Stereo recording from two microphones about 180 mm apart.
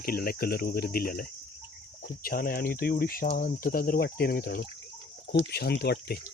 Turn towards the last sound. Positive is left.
turn(degrees=65)  # may be behind; listen again after turning